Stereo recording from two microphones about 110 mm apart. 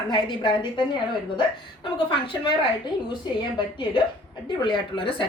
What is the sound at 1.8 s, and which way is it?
Speech, 50° left (ahead or behind).